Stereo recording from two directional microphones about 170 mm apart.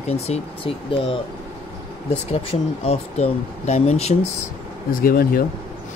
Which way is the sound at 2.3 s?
35° left (ahead or behind).